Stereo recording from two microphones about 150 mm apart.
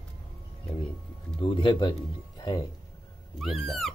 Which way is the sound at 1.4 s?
30° left (ahead or behind).